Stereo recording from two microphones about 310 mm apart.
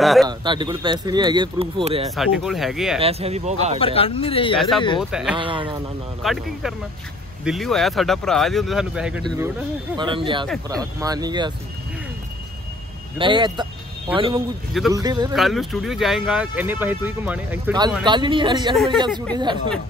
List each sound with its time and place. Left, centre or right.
0.0 s speech: centre
0.3 s speech: centre
2.1 s speech: centre
3.0 s speech: centre
3.8 s speech: centre
4.6 s speech: centre
5.3 s speech: centre
6.2 s speech: centre
9.9 s speech: centre
13.2 s speech: centre
15.3 s speech: centre